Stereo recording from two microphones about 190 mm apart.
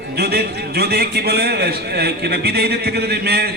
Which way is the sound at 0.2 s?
55° right (ahead or behind).